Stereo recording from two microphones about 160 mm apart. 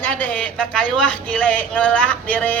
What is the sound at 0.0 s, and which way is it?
Speech, 10° left (ahead or behind).